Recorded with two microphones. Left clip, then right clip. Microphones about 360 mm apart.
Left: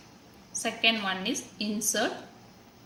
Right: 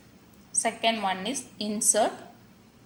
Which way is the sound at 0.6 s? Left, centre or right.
Centre.